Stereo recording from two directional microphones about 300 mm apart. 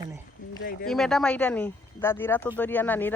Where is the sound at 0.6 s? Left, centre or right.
Left.